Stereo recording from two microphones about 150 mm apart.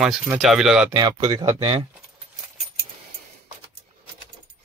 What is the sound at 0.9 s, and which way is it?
Speech, 25° right (ahead or behind).